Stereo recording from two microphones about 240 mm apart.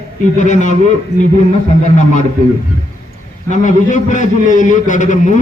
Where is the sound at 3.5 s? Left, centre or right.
Left.